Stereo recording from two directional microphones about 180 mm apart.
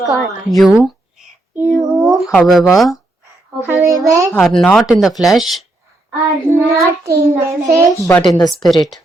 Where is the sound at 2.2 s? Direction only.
Centre (ahead or behind).